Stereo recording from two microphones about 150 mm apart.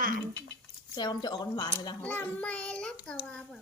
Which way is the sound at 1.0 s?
30° left (ahead or behind).